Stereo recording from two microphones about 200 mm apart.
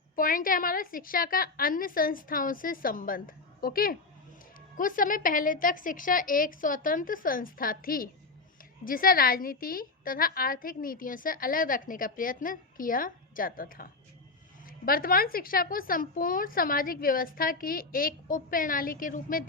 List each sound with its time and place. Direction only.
0.2 s a woman's voice: 45° left (ahead or behind)